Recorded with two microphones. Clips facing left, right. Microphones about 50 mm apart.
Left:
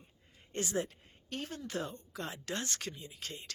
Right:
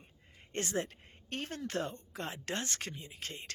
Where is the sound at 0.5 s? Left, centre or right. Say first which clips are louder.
Even; right.